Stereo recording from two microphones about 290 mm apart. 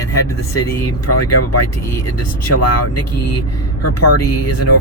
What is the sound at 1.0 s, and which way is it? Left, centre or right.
Speech, left.